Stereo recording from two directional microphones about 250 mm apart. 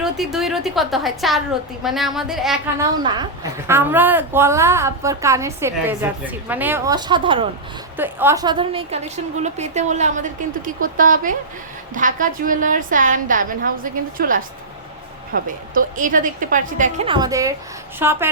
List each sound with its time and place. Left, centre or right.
0.0 s a woman's voice: centre
3.0 s speech: centre
7.9 s a woman's voice: centre